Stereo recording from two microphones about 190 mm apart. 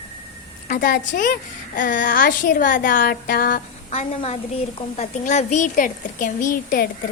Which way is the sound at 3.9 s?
35° left (ahead or behind).